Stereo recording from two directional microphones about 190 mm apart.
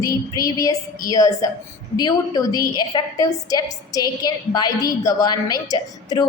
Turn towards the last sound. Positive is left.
turn(degrees=20)  # may be behind; listen again after turning